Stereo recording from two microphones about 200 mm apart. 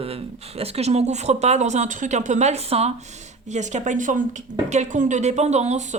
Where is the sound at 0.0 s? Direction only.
30° right (ahead or behind).